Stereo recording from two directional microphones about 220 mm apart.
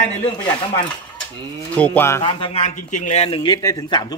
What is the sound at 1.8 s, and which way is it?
Speech, 5° left (ahead or behind).